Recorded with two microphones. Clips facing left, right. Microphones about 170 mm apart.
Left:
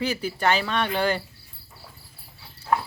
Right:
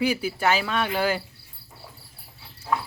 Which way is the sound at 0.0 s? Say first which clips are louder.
Right 1 dB; 10° right (ahead or behind).